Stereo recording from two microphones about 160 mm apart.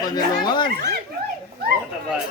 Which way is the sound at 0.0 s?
25° left (ahead or behind).